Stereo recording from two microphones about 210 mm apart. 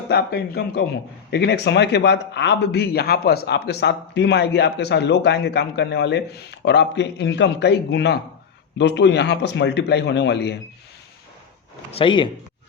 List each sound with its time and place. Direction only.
0.1 s a man's voice: 50° left (ahead or behind)
11.9 s speech: 20° left (ahead or behind)